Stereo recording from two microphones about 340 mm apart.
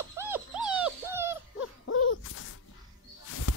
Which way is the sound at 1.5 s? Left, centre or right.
Left.